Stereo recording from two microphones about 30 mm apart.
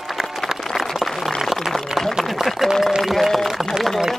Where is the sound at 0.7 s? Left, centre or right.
Centre.